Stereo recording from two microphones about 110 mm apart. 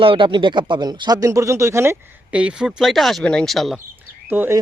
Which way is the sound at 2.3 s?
10° right (ahead or behind).